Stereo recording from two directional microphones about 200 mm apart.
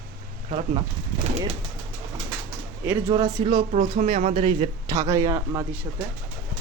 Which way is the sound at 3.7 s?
45° right (ahead or behind).